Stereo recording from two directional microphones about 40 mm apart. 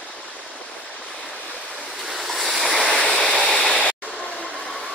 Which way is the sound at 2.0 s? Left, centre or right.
Centre.